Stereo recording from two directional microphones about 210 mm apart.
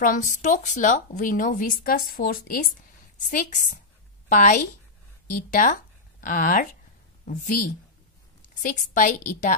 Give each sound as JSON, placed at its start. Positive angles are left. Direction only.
{"t": 0.0, "sound": "a woman's voice", "side_deg": 40}
{"t": 8.6, "sound": "a woman's voice", "side_deg": 35}